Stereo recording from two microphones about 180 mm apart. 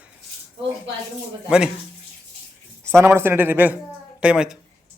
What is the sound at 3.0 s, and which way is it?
A child's voice, 15° right (ahead or behind).